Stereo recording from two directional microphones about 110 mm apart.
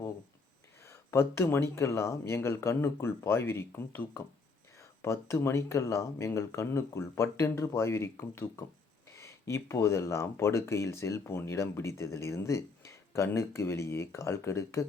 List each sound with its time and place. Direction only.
0.9 s speech: 25° left (ahead or behind)